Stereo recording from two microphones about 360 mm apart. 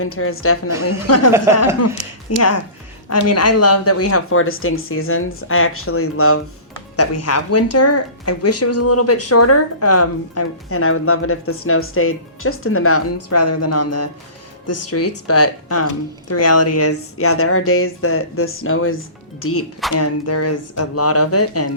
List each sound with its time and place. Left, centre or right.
0.0 s speech: left
2.3 s speech: left